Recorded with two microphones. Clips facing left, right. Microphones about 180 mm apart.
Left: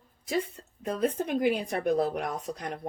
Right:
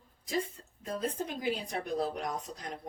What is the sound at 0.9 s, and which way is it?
A woman's voice, 65° left (ahead or behind).